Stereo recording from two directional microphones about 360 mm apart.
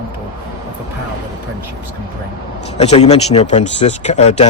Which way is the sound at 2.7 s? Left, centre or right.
Centre.